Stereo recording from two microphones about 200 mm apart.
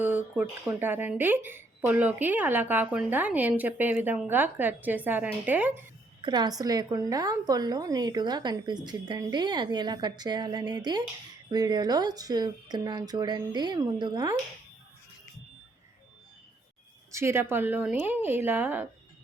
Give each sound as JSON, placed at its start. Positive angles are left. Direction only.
{"t": 0.0, "sound": "speech", "side_deg": -10}
{"t": 6.2, "sound": "a woman's voice", "side_deg": -20}
{"t": 17.1, "sound": "speech", "side_deg": -15}